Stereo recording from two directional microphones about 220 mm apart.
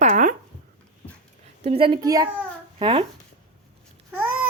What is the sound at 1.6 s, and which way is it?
A woman's voice, 25° right (ahead or behind).